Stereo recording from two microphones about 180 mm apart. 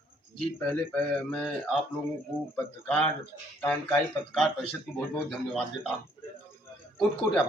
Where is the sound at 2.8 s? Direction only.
10° left (ahead or behind).